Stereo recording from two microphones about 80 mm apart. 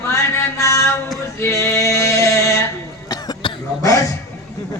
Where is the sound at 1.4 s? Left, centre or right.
Left.